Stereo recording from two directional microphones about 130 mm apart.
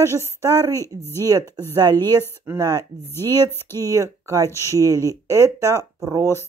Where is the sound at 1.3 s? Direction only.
30° right (ahead or behind).